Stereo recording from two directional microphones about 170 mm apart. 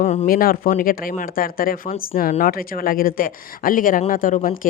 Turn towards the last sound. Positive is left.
turn(degrees=50)  # may be behind; listen again after turning